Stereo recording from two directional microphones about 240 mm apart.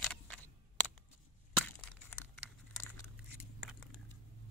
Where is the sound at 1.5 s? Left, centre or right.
Centre.